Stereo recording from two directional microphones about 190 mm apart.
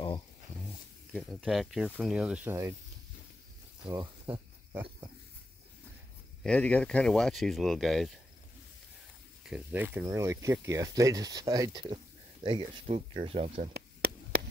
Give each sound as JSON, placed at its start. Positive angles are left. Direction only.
{"t": 1.1, "sound": "speech", "side_deg": 0}
{"t": 3.8, "sound": "pig", "side_deg": -25}
{"t": 6.4, "sound": "speech", "side_deg": 5}
{"t": 9.5, "sound": "speech", "side_deg": -10}
{"t": 13.7, "sound": "a sound", "side_deg": -55}